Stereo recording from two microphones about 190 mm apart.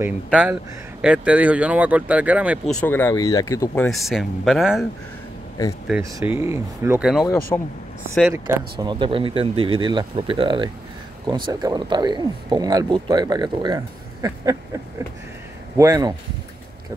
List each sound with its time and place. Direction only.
0.0 s speech: 10° right (ahead or behind)
2.7 s speech: 10° left (ahead or behind)
3.7 s speech: 5° left (ahead or behind)
6.0 s speech: 15° right (ahead or behind)
7.5 s speech: 10° left (ahead or behind)
8.2 s speech: 10° right (ahead or behind)
8.7 s speech: 25° right (ahead or behind)
15.8 s speech: 15° right (ahead or behind)